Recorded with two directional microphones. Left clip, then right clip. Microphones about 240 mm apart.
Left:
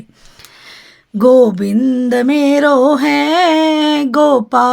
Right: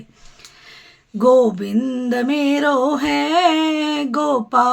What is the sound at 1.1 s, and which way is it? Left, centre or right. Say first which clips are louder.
Music: left 5 dB; left.